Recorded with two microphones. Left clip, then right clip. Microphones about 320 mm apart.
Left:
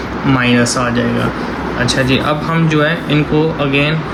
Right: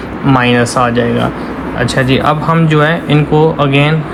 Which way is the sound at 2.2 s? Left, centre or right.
Centre.